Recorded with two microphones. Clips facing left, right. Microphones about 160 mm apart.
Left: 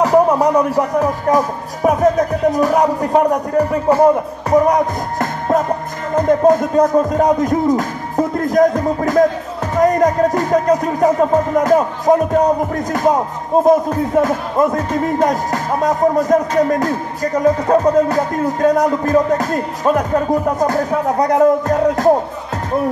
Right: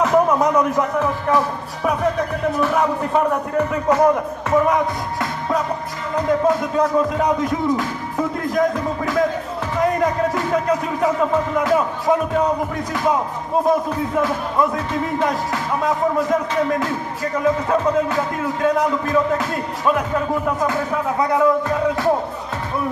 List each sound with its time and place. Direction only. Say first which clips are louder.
0.0 s speech: left 4 dB; 35° left (ahead or behind)
6.1 s music: left 6 dB; 45° left (ahead or behind)